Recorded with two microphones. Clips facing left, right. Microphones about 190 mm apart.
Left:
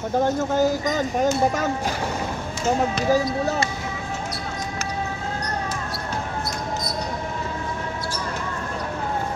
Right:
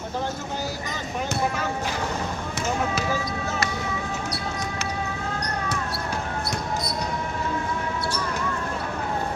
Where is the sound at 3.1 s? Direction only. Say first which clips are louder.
Left 7 dB; 40° left (ahead or behind).